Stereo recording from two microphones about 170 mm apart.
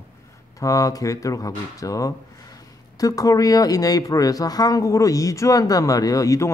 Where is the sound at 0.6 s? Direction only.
20° left (ahead or behind).